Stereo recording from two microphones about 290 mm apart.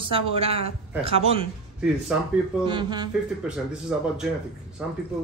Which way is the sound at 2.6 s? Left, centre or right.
Centre.